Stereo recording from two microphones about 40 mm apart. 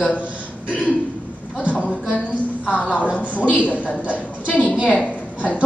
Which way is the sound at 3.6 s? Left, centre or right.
Left.